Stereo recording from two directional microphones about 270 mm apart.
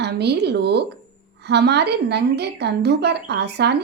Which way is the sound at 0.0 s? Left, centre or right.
Right.